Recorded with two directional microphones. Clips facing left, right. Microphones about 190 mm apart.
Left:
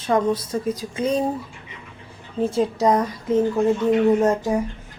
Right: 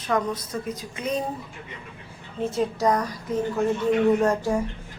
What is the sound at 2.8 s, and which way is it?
A woman's voice, 20° left (ahead or behind).